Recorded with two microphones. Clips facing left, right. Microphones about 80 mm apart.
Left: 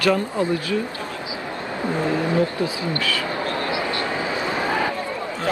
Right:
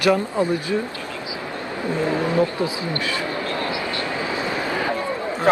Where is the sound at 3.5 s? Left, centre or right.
Left.